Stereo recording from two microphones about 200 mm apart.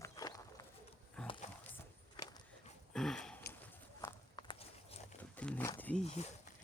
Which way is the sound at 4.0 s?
15° left (ahead or behind).